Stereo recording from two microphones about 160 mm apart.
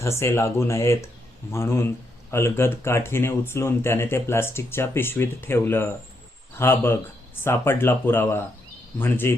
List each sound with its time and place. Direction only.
0.0 s speech: 15° left (ahead or behind)